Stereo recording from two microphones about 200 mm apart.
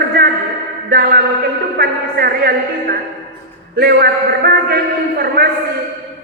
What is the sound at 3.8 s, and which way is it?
A man's voice, 55° right (ahead or behind).